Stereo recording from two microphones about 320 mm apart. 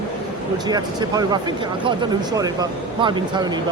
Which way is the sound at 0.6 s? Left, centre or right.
Centre.